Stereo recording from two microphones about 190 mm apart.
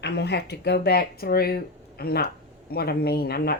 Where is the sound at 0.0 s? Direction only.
60° left (ahead or behind).